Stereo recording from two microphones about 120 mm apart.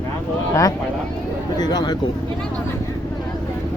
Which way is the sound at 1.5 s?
35° left (ahead or behind).